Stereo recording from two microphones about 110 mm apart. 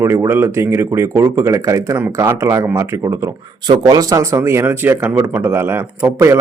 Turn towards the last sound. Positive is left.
turn(degrees=-20)  # may be behind; listen again after turning